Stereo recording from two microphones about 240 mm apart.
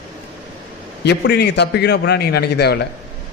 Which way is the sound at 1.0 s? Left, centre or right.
Left.